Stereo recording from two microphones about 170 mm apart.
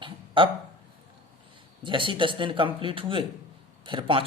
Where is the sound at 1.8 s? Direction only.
30° right (ahead or behind).